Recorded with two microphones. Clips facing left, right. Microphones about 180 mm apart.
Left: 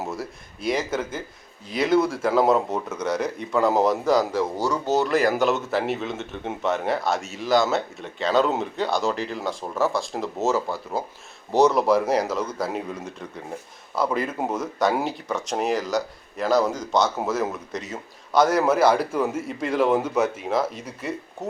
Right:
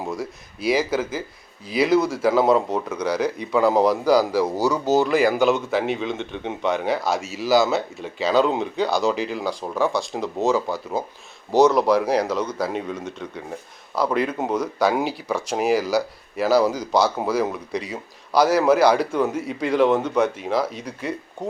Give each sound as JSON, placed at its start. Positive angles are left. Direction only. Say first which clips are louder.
{"t": 0.0, "sound": "speech", "louder": "right 2 dB", "side_deg": 5}